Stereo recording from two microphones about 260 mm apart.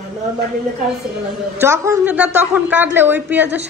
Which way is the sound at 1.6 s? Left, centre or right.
Centre.